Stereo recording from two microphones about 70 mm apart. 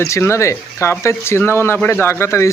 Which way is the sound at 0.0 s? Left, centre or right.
Left.